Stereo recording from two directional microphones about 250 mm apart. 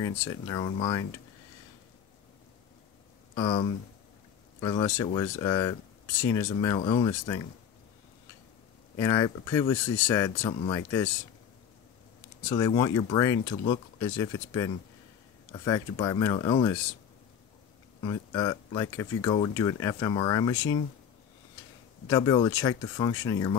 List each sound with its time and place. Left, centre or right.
0.3 s speech: centre
3.3 s speech: centre
8.9 s speech: centre
12.4 s speech: centre
18.0 s speech: centre
22.0 s speech: centre